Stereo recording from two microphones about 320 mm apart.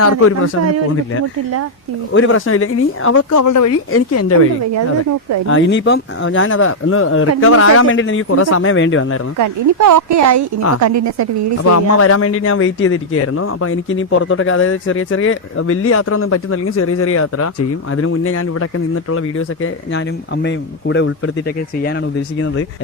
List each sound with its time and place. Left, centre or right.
0.0 s a man's voice: left
2.1 s a man's voice: left
3.9 s a man's voice: left
5.5 s speech: left
9.4 s speech: right
11.6 s a man's voice: left